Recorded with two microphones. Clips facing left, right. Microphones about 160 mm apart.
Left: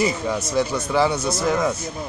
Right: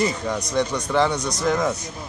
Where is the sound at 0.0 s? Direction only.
5° left (ahead or behind).